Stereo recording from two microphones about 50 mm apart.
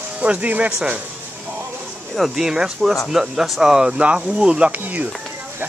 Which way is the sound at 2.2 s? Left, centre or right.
Centre.